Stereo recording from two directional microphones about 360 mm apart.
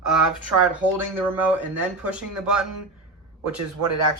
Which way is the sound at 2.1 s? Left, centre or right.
Centre.